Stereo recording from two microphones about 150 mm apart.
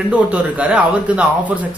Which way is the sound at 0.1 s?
10° right (ahead or behind).